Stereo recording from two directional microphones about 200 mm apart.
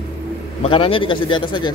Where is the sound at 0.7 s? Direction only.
25° left (ahead or behind).